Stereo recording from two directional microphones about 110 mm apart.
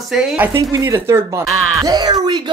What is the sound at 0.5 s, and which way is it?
Speech, 30° right (ahead or behind).